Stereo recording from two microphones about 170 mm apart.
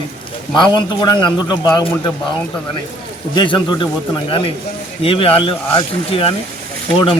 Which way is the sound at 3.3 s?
25° left (ahead or behind).